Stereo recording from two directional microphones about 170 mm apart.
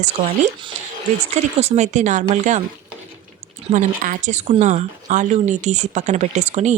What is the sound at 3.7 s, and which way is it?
Speech, 45° right (ahead or behind).